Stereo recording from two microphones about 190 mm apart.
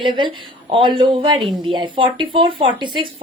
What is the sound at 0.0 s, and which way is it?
A woman's voice, 25° right (ahead or behind).